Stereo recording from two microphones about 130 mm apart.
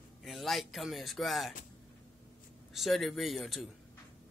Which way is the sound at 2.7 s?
Centre (ahead or behind).